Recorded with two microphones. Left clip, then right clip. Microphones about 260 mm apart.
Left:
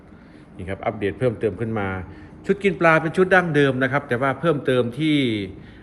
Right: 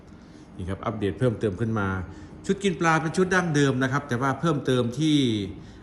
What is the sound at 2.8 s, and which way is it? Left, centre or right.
A man's voice, centre.